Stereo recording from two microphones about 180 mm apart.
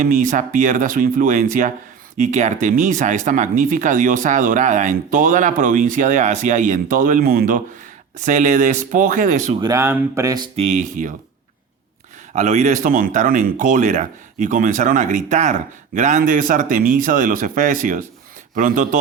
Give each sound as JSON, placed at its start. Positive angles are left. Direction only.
{"t": 0.0, "sound": "speech", "side_deg": -45}
{"t": 9.6, "sound": "speech", "side_deg": -20}
{"t": 10.6, "sound": "speech", "side_deg": -40}
{"t": 12.3, "sound": "speech", "side_deg": -40}